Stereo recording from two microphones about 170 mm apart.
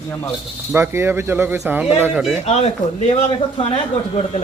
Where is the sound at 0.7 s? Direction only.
15° right (ahead or behind).